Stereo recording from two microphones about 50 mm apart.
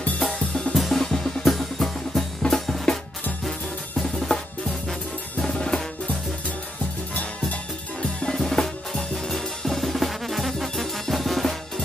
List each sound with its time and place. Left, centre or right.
0.3 s drum kit: centre
0.7 s music: centre
4.0 s drum: centre
5.5 s drum: centre
8.0 s music: centre
8.4 s drum: centre